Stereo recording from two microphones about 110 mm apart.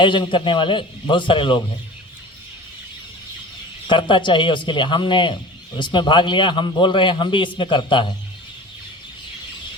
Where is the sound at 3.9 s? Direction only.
45° left (ahead or behind).